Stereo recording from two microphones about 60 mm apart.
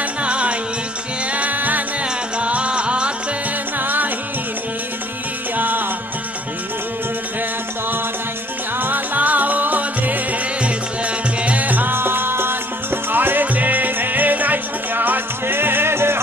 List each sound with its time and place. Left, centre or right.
0.2 s music: centre
3.7 s music: right
5.6 s music: right
8.7 s music: right